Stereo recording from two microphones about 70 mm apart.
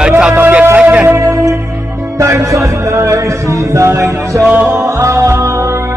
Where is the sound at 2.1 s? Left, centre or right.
Right.